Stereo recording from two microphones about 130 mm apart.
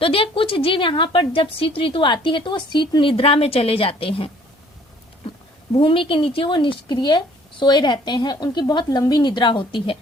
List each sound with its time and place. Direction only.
0.0 s a woman's voice: 45° left (ahead or behind)
5.7 s a woman's voice: 45° left (ahead or behind)